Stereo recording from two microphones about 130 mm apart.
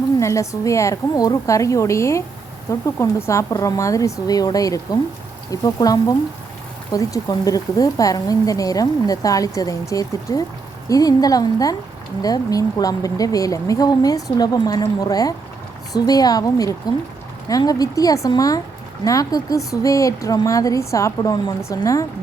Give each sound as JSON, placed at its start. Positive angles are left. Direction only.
{"t": 0.2, "sound": "a woman's voice", "side_deg": 25}